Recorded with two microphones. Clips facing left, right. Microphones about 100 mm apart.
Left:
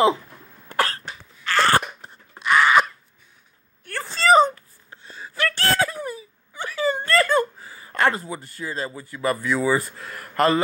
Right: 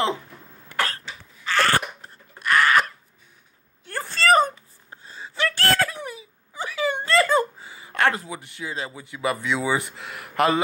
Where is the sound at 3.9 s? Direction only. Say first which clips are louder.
Even; 20° right (ahead or behind).